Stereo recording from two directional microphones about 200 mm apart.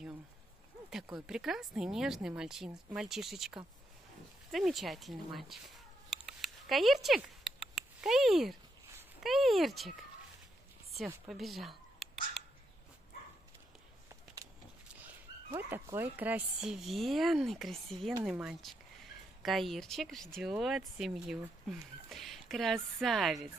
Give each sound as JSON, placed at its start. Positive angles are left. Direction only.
{"t": 1.1, "sound": "speech", "side_deg": -5}
{"t": 6.0, "sound": "a sound", "side_deg": 0}
{"t": 9.2, "sound": "speech", "side_deg": 0}
{"t": 11.1, "sound": "speech", "side_deg": 0}
{"t": 14.0, "sound": "a sound", "side_deg": -15}
{"t": 15.5, "sound": "speech", "side_deg": -10}